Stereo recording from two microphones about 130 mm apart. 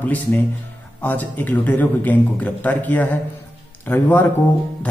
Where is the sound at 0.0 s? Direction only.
15° left (ahead or behind).